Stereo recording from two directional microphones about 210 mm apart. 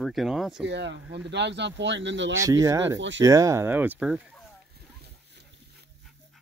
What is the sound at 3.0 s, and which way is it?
Speech, 60° right (ahead or behind).